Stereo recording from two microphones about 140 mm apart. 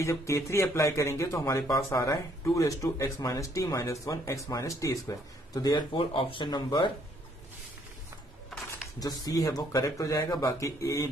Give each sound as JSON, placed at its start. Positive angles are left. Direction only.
{"t": 0.0, "sound": "speech", "side_deg": 20}
{"t": 5.9, "sound": "speech", "side_deg": 40}
{"t": 9.0, "sound": "speech", "side_deg": 25}